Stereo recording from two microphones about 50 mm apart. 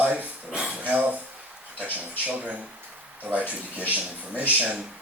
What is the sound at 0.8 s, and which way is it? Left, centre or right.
Speech, right.